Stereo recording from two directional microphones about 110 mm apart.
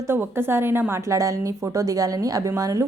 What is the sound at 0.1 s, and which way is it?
A woman's voice, 20° right (ahead or behind).